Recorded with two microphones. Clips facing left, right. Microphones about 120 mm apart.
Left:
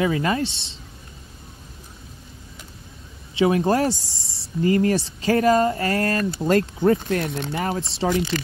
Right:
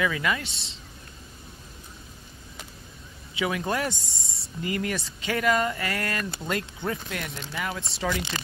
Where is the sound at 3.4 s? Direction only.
30° left (ahead or behind).